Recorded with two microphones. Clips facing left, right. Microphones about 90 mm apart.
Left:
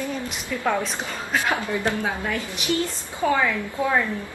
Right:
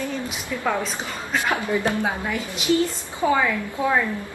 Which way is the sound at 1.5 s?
20° right (ahead or behind).